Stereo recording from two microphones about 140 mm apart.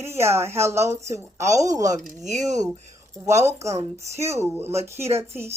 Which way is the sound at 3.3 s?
20° right (ahead or behind).